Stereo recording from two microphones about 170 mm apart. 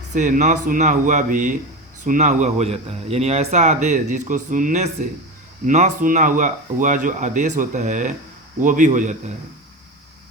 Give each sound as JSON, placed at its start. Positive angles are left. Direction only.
{"t": 0.1, "sound": "speech", "side_deg": -45}